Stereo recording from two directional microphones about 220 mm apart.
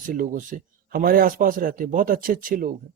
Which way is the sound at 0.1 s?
35° right (ahead or behind).